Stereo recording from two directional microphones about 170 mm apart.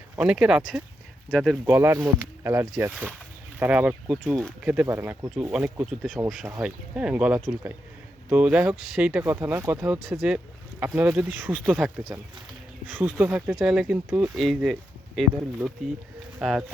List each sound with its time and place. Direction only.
0.2 s speech: 5° right (ahead or behind)
1.6 s speech: 10° right (ahead or behind)
10.0 s speech: centre (ahead or behind)
12.9 s speech: 10° right (ahead or behind)